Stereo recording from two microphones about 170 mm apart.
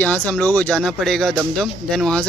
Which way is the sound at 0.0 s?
10° left (ahead or behind).